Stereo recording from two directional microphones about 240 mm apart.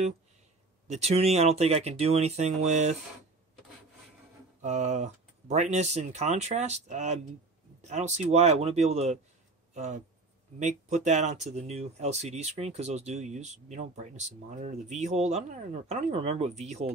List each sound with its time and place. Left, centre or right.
0.8 s speech: right
4.6 s speech: right